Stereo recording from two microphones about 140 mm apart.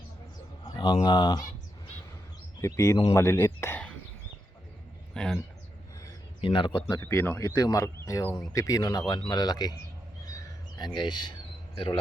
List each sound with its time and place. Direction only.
0.6 s bird: 35° left (ahead or behind)
1.0 s speech: 30° left (ahead or behind)
2.6 s speech: 20° left (ahead or behind)
5.1 s speech: 5° left (ahead or behind)
6.4 s speech: 35° left (ahead or behind)
7.0 s speech: 15° left (ahead or behind)
10.2 s bird: 25° left (ahead or behind)